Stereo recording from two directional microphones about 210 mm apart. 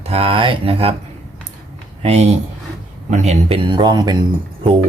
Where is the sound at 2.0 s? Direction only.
30° right (ahead or behind).